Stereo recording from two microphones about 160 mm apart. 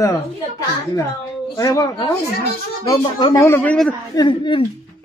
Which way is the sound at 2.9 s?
30° left (ahead or behind).